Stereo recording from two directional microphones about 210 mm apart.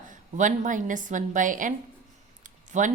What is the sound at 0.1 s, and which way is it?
A woman's voice, 35° right (ahead or behind).